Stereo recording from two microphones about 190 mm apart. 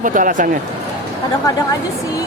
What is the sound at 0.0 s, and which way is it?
Speech, 45° right (ahead or behind).